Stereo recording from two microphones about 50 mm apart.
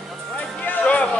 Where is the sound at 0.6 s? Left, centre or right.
Left.